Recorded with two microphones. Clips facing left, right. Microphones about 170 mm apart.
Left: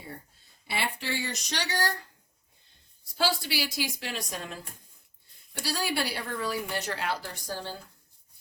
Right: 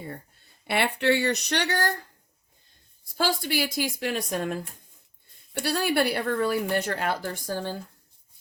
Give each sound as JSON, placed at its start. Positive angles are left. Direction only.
{"t": 0.7, "sound": "speech", "side_deg": -65}
{"t": 3.2, "sound": "a woman's voice", "side_deg": -50}
{"t": 5.6, "sound": "a woman's voice", "side_deg": -55}